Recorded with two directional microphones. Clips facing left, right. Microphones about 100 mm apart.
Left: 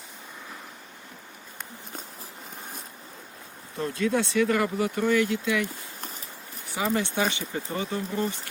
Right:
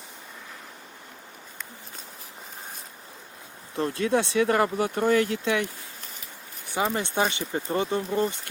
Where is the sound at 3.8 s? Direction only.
30° right (ahead or behind).